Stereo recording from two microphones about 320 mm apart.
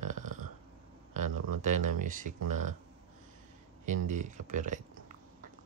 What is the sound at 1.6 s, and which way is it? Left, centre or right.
Speech, right.